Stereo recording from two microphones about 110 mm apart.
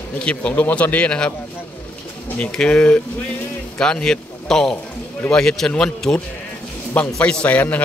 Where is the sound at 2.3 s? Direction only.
10° left (ahead or behind).